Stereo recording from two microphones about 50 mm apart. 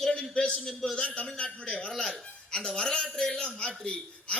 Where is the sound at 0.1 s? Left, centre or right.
Centre.